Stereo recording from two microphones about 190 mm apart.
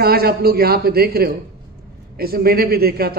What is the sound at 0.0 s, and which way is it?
A man's voice, 55° right (ahead or behind).